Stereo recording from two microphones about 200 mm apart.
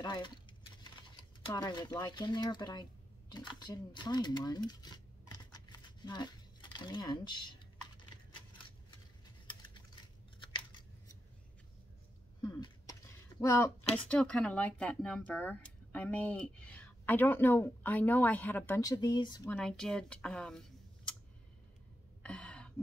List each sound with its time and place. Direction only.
0.0 s speech: 20° left (ahead or behind)
1.4 s speech: 20° left (ahead or behind)
10.4 s scissors: 25° left (ahead or behind)
12.4 s a sound: 20° left (ahead or behind)
13.4 s speech: 15° left (ahead or behind)
19.5 s speech: 5° left (ahead or behind)
22.2 s gasp: 5° left (ahead or behind)